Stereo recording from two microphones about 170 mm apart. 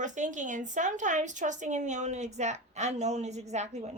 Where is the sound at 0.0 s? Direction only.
45° right (ahead or behind).